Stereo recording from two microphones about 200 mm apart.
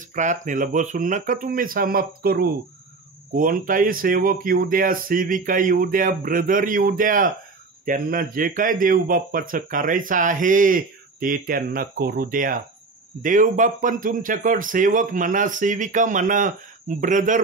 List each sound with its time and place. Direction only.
0.1 s speech: 40° right (ahead or behind)